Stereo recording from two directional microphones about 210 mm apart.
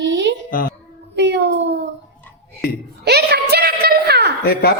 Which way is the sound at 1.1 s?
55° right (ahead or behind).